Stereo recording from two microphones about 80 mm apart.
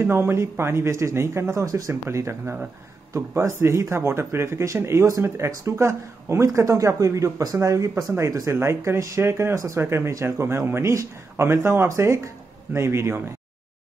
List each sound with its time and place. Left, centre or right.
0.0 s speech: right
8.5 s speech: right